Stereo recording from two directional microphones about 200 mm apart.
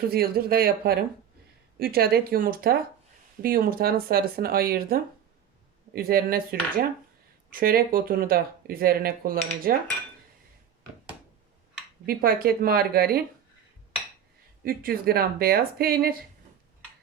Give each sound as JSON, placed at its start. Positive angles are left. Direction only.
{"t": 0.1, "sound": "speech", "side_deg": -50}
{"t": 12.0, "sound": "speech", "side_deg": -50}
{"t": 14.6, "sound": "speech", "side_deg": -45}